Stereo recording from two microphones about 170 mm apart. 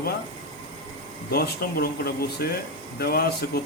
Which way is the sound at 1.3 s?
65° left (ahead or behind).